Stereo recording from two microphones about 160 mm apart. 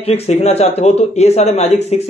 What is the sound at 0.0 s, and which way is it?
Speech, 40° left (ahead or behind).